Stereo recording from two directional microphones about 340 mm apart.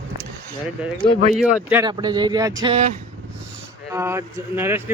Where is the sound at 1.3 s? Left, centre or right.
Centre.